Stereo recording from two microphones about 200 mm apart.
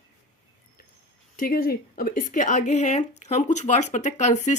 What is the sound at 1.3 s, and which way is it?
A woman's voice, 45° left (ahead or behind).